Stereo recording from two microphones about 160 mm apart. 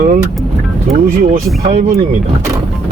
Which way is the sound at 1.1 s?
70° right (ahead or behind).